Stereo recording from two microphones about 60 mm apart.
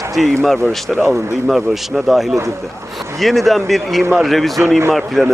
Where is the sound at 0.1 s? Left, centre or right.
Centre.